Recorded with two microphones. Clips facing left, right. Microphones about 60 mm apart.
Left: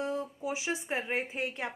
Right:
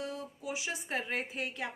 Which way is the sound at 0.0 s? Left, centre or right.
Left.